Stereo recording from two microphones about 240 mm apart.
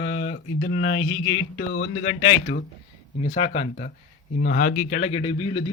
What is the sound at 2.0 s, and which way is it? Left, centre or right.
A man's voice, left.